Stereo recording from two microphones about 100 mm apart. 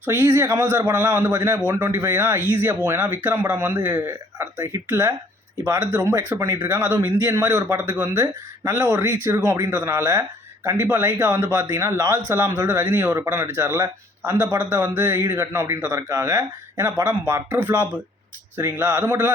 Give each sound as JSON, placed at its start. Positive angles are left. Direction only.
{"t": 0.0, "sound": "a man's voice", "side_deg": -25}
{"t": 4.5, "sound": "a man's voice", "side_deg": -35}